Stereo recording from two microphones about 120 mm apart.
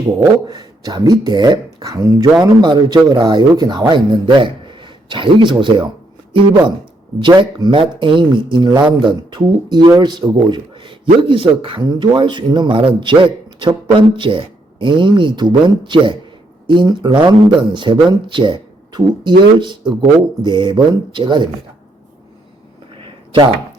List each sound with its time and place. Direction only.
0.4 s speech: 35° right (ahead or behind)